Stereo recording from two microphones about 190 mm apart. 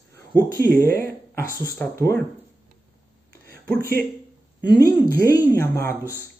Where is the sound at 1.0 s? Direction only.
15° left (ahead or behind).